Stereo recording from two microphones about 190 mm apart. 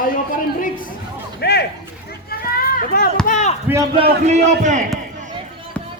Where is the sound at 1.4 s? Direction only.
60° left (ahead or behind).